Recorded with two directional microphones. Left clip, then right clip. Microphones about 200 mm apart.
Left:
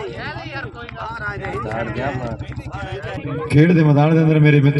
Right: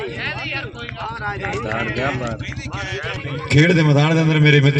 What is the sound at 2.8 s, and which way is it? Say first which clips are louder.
Speech: right 2 dB; 40° left (ahead or behind).